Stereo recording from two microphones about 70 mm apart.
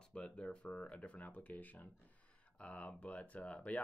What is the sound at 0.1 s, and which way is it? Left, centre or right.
Speech, centre.